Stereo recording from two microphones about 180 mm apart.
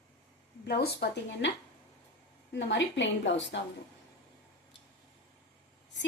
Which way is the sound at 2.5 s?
85° left.